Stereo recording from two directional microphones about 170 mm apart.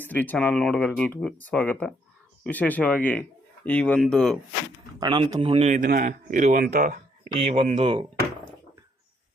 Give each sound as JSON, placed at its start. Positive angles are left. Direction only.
{"t": 0.0, "sound": "a man's voice", "side_deg": 10}
{"t": 4.9, "sound": "a man's voice", "side_deg": -25}
{"t": 7.4, "sound": "a man's voice", "side_deg": -35}